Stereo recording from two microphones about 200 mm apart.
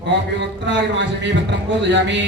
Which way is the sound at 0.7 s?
65° right (ahead or behind).